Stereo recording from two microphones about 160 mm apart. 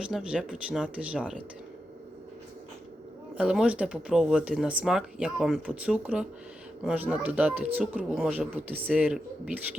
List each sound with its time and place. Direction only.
0.0 s speech: 5° right (ahead or behind)
3.3 s speech: 5° right (ahead or behind)